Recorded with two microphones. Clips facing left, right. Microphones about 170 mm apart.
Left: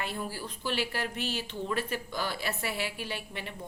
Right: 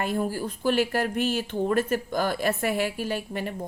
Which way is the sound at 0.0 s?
45° right (ahead or behind).